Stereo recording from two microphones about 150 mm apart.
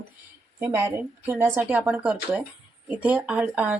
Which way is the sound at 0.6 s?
20° right (ahead or behind).